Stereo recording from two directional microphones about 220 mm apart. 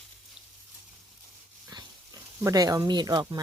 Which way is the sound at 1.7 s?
15° right (ahead or behind).